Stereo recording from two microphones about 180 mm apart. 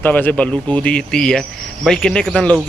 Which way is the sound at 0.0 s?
10° left (ahead or behind).